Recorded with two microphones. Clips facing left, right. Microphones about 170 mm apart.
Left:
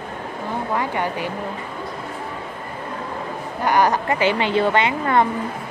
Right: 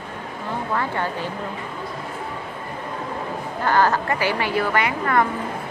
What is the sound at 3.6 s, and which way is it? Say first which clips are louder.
A woman's voice: left 1 dB; 15° left (ahead or behind).